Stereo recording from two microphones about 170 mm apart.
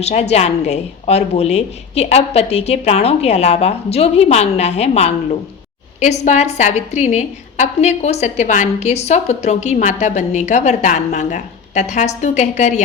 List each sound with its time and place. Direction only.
0.0 s a woman's voice: 40° left (ahead or behind)